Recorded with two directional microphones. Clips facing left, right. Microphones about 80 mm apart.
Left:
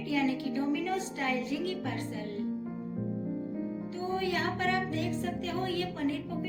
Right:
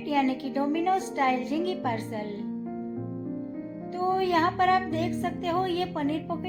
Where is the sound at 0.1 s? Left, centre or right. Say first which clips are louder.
Right 4 dB; right.